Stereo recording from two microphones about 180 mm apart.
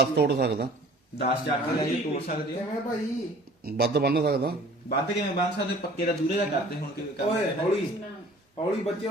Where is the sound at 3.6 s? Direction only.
60° right (ahead or behind).